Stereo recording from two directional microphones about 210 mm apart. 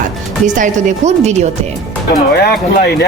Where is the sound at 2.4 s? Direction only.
50° left (ahead or behind).